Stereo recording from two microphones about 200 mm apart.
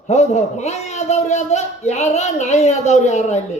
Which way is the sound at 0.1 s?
35° left (ahead or behind).